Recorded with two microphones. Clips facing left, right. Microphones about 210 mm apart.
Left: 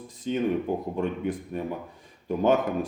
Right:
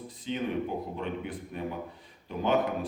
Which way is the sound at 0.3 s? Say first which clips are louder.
Left 6 dB; 50° left (ahead or behind).